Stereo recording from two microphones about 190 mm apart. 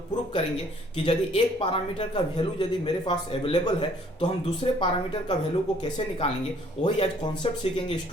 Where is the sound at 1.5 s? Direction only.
25° left (ahead or behind).